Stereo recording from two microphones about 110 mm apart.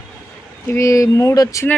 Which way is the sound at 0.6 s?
30° left (ahead or behind).